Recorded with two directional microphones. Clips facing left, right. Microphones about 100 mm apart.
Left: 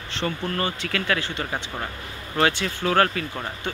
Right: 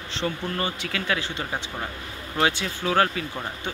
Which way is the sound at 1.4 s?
Centre (ahead or behind).